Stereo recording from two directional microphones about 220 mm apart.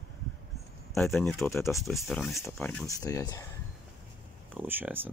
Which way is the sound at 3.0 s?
15° left (ahead or behind).